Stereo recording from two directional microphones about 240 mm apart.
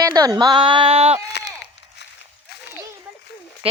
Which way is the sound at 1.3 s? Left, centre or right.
Left.